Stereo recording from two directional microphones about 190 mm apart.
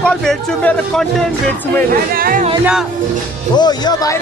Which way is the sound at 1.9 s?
50° right (ahead or behind).